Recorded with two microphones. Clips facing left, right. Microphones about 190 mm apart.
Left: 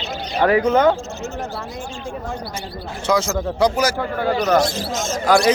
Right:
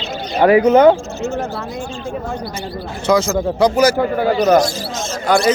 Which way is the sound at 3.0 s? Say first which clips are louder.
Right 4 dB; 45° right (ahead or behind).